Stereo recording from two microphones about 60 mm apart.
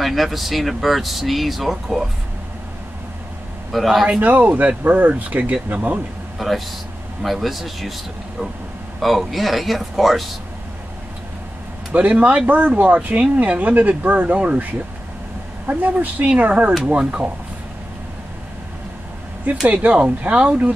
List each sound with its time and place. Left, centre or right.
0.0 s speech: centre
3.7 s speech: centre
4.2 s speech: right
6.3 s speech: centre
9.0 s speech: centre
11.9 s speech: right
19.5 s speech: right